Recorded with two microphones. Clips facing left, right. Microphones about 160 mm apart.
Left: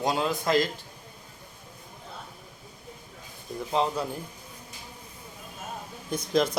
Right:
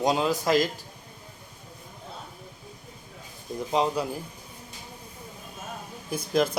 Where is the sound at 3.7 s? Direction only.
15° right (ahead or behind).